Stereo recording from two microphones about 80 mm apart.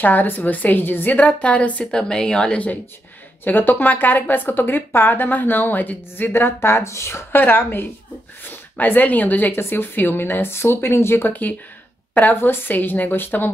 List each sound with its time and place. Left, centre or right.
0.0 s speech: left